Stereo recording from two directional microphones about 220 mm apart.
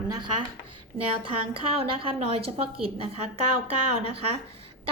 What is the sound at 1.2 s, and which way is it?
A woman's voice, 25° right (ahead or behind).